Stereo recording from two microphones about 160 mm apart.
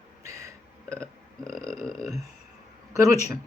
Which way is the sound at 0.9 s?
5° left (ahead or behind).